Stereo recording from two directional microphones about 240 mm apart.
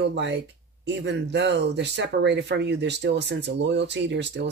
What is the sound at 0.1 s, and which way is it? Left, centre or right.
Speech, right.